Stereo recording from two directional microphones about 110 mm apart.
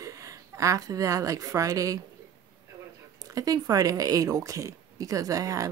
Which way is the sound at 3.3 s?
35° right (ahead or behind).